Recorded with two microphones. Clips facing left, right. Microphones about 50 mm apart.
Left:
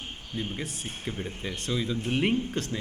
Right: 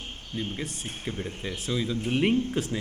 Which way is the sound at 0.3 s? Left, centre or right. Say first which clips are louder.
Right 1 dB; centre.